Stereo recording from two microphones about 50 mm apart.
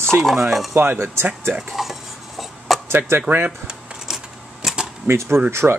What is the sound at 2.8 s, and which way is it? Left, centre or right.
Speech, right.